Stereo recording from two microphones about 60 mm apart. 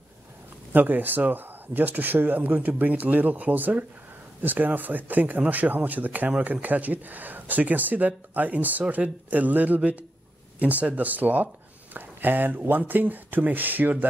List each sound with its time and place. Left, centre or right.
0.7 s speech: right